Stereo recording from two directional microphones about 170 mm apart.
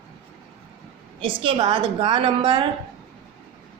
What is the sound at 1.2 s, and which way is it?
A woman's voice, 30° right (ahead or behind).